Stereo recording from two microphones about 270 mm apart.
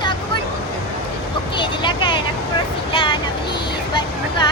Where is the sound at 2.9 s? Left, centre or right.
Centre.